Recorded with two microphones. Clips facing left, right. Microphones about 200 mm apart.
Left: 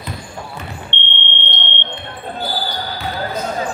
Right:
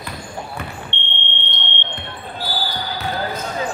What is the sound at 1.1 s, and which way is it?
Smoke detector, 60° left (ahead or behind).